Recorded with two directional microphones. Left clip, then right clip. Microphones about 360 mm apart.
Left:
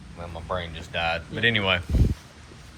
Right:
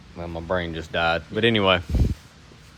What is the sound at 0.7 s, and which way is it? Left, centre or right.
Speech, centre.